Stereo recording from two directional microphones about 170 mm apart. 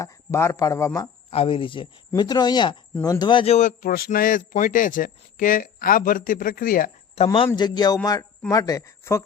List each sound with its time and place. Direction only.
0.0 s a man's voice: 20° left (ahead or behind)
1.3 s a man's voice: 35° left (ahead or behind); by 6.9 s 55° left (ahead or behind)
7.3 s speech: 30° left (ahead or behind)